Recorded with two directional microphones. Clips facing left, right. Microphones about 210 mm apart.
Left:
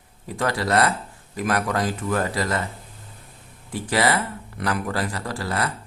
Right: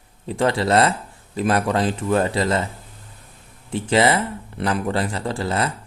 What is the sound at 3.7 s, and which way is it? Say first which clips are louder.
Speech: right 4 dB; 25° right (ahead or behind).